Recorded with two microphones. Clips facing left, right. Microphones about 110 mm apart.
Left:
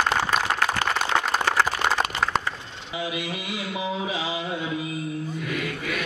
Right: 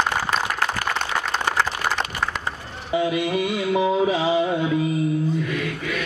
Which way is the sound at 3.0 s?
50° right (ahead or behind).